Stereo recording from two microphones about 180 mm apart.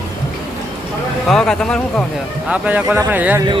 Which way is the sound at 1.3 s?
5° left (ahead or behind).